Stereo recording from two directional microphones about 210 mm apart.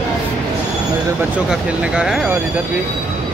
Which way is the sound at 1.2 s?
5° right (ahead or behind).